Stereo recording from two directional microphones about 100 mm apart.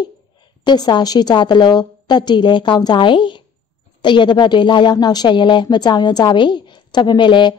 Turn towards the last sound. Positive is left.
turn(degrees=50)  # may be behind; listen again after turning